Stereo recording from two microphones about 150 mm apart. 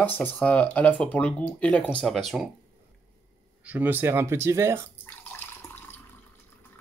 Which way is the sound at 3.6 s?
10° right (ahead or behind).